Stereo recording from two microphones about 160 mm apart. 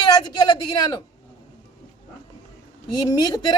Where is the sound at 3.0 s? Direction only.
20° left (ahead or behind).